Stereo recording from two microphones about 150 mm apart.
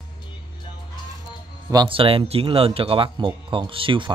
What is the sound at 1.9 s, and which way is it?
Speech, 35° right (ahead or behind).